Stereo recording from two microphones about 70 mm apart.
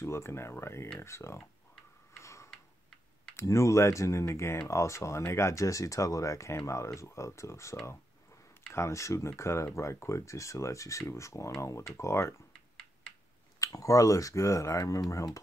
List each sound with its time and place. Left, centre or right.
0.0 s speech: left
2.1 s tick-tock: left
3.4 s speech: left
8.7 s speech: left
13.6 s speech: left